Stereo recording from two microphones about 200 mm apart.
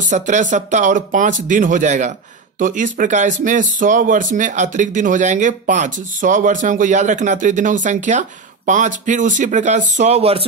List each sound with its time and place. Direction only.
0.0 s speech: 40° right (ahead or behind)